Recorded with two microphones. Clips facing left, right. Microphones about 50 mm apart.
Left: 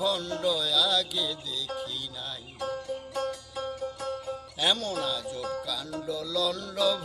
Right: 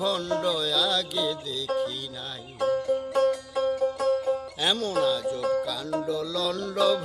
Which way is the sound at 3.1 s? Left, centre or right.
Right.